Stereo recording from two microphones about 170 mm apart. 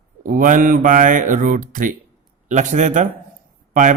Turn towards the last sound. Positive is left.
turn(degrees=-50)  # may be behind; listen again after turning